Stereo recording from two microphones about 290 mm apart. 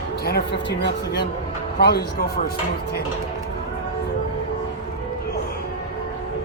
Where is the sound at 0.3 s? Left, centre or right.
Left.